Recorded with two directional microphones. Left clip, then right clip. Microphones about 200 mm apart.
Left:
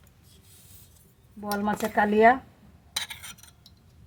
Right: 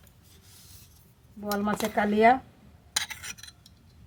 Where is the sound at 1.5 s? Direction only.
10° left (ahead or behind).